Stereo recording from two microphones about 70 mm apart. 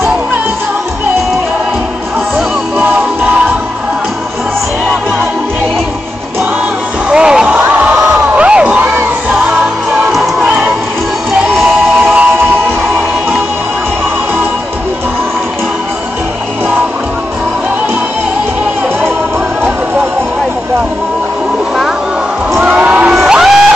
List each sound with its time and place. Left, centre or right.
7.1 s slam: centre
8.3 s crowd: centre
9.8 s music: centre
12.0 s music: right
22.6 s a sound: centre
23.1 s music: centre